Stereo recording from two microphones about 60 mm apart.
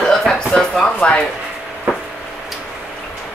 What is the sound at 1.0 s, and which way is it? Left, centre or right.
Speech, centre.